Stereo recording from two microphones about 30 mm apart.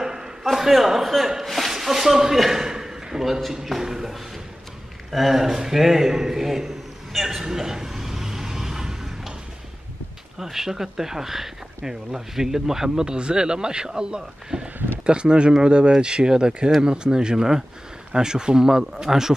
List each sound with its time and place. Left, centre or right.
0.0 s a sound: centre
0.4 s a man's voice: centre
2.6 s a sound: centre
3.8 s speech: centre
5.1 s a man's voice: centre
7.4 s vehicle: centre
10.4 s speech: centre